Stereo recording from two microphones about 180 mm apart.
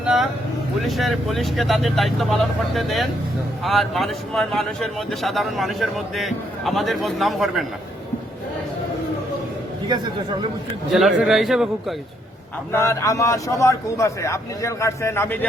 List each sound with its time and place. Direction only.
0.0 s vehicle: 5° right (ahead or behind)
0.8 s speech: centre (ahead or behind)
10.9 s speech: centre (ahead or behind)
12.7 s a man's voice: 15° left (ahead or behind)